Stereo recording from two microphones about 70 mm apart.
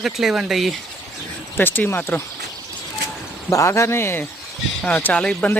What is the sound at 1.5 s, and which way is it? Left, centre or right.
Speech, left.